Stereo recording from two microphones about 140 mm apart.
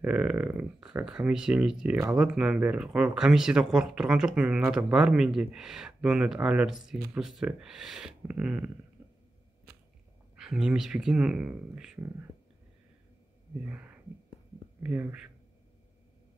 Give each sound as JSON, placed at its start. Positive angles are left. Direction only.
{"t": 0.0, "sound": "speech", "side_deg": -10}
{"t": 10.3, "sound": "speech", "side_deg": -5}
{"t": 13.7, "sound": "speech", "side_deg": -10}